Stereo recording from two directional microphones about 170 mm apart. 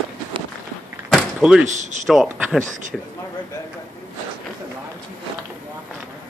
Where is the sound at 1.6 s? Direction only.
45° right (ahead or behind).